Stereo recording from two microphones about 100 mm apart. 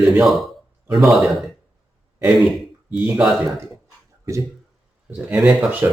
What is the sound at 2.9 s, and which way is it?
Speech, 15° right (ahead or behind).